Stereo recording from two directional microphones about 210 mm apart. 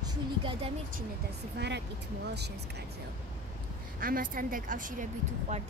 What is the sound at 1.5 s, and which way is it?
Speech, 55° right (ahead or behind).